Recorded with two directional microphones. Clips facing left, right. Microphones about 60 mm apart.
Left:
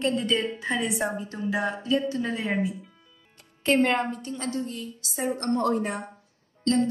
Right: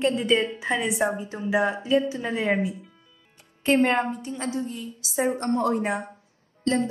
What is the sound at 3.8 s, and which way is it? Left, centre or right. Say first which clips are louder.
Speech: right 2 dB; right.